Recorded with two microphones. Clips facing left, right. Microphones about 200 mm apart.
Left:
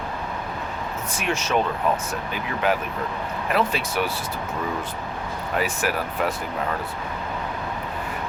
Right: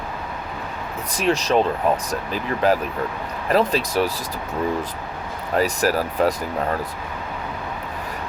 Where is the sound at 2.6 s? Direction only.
35° right (ahead or behind).